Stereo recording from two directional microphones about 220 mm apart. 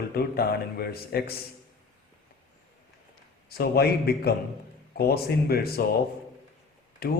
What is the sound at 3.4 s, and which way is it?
Speech, 45° left (ahead or behind).